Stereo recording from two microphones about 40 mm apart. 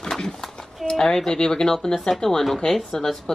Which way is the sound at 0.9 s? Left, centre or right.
Centre.